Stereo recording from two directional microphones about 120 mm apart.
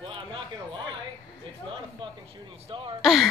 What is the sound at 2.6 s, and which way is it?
Throat clearing, 45° right (ahead or behind).